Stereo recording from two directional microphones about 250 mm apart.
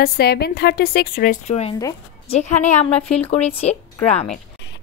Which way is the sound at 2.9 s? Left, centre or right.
Centre.